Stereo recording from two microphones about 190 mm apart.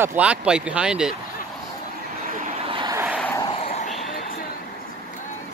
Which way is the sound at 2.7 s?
25° right (ahead or behind).